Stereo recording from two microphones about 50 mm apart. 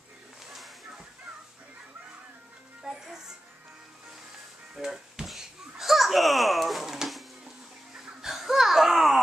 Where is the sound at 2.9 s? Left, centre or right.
Centre.